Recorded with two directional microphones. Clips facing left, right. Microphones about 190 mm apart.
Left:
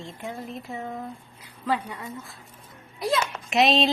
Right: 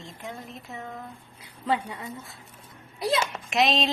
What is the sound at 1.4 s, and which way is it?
Speech, 25° right (ahead or behind).